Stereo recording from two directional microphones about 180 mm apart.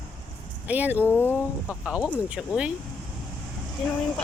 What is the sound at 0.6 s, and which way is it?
Speech, 10° right (ahead or behind).